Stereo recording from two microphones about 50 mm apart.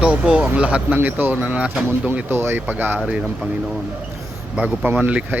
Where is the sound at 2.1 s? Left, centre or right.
Right.